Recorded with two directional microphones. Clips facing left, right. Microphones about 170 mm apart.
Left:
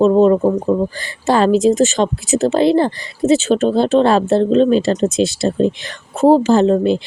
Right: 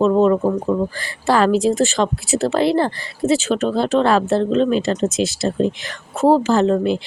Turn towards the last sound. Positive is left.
turn(degrees=30)  # may be behind; listen again after turning